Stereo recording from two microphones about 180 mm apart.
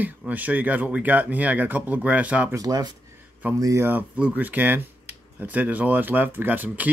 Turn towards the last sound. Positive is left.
turn(degrees=-10)  # may be behind; listen again after turning